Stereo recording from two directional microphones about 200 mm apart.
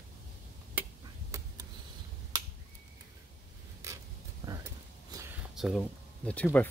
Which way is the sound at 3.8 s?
15° right (ahead or behind).